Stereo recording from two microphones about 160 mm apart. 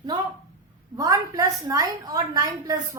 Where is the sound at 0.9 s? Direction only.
20° right (ahead or behind).